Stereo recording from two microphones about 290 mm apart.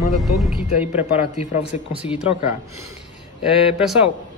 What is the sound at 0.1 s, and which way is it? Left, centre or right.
A man's voice, centre.